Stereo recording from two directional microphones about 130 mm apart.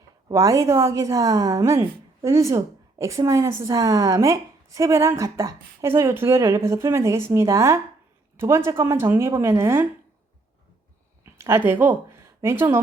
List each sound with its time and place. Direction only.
0.3 s a woman's voice: 25° right (ahead or behind)
11.3 s speech: 20° right (ahead or behind)